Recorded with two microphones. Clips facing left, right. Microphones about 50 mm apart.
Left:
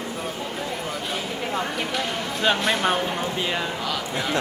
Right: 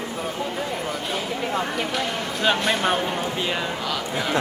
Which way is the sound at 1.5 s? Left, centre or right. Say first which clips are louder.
Even; centre.